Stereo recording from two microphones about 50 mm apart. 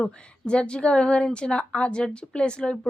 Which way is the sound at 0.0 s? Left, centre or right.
Left.